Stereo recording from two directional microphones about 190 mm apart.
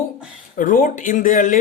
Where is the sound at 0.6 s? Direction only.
45° left (ahead or behind).